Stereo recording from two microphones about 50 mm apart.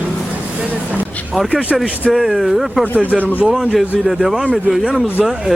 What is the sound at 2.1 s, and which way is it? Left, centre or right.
Speech, centre.